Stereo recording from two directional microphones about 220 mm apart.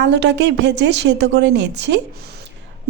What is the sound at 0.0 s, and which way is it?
A woman's voice, 50° right (ahead or behind).